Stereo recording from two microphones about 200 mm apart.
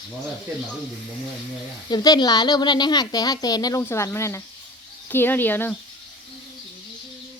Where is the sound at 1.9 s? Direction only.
20° left (ahead or behind).